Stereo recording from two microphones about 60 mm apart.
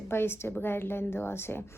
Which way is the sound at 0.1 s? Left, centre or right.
Left.